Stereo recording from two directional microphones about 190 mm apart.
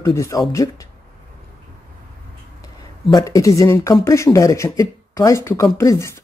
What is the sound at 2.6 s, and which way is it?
Speech, 20° left (ahead or behind).